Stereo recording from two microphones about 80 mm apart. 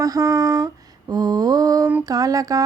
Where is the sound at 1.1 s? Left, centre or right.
Right.